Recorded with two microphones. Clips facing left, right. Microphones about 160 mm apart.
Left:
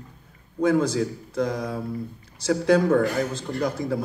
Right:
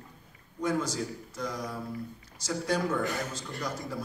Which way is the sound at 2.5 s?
80° left.